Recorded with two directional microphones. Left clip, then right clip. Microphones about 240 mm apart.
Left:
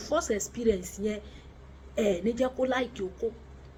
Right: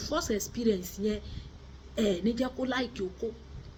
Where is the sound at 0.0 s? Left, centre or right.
Centre.